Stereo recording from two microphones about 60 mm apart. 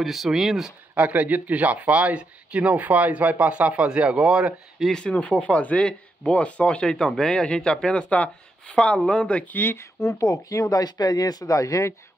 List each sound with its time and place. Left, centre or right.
0.0 s speech: centre
0.9 s speech: right
4.9 s speech: left
8.9 s speech: centre
9.2 s speech: left
10.0 s speech: left